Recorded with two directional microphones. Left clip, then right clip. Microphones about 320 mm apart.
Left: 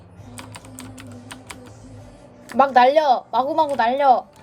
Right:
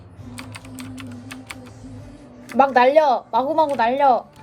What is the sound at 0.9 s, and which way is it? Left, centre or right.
Typing, left.